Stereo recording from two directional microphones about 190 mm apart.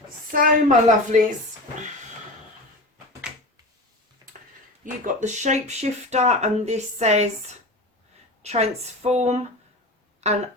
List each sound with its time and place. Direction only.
0.3 s speech: 40° right (ahead or behind)
5.0 s speech: 40° right (ahead or behind)
8.4 s speech: 35° right (ahead or behind)